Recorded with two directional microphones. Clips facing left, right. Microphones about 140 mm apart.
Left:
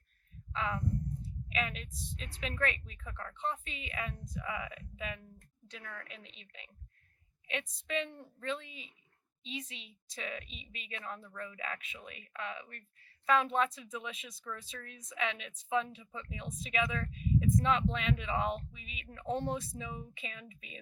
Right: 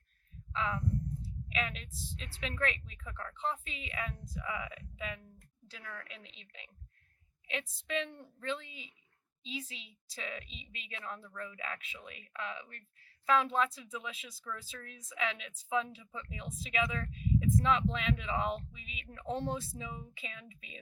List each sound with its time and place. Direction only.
0.5 s speech: centre (ahead or behind)